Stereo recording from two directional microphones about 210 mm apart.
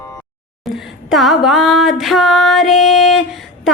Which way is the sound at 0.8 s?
Centre (ahead or behind).